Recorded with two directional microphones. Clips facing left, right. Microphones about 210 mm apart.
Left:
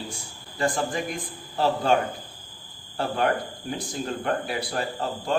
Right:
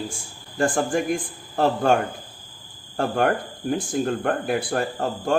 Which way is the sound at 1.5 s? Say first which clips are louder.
Right 3 dB; 50° right (ahead or behind).